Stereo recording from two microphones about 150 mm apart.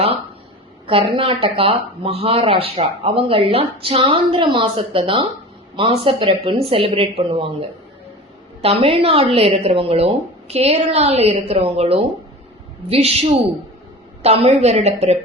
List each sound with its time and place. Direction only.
0.9 s speech: 40° right (ahead or behind)
8.6 s a woman's voice: 40° right (ahead or behind)